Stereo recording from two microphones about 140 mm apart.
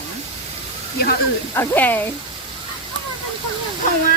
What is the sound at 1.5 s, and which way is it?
Speech, 15° left (ahead or behind).